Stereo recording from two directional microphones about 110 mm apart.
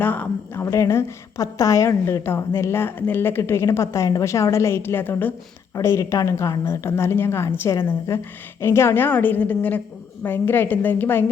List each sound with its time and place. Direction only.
0.0 s a woman's voice: 15° left (ahead or behind)